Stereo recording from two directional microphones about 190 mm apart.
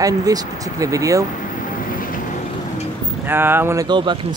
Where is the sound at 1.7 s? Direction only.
45° left (ahead or behind).